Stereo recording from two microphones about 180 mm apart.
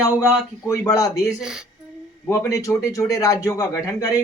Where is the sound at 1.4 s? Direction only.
5° right (ahead or behind).